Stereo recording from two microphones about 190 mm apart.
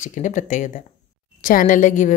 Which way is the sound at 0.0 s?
40° left (ahead or behind).